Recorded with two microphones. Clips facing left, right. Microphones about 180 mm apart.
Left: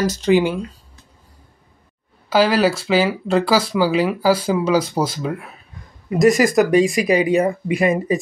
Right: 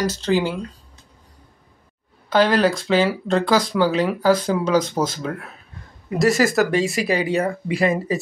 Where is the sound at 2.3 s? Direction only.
5° left (ahead or behind).